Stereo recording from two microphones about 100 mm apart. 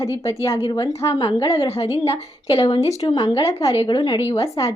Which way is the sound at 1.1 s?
50° left (ahead or behind).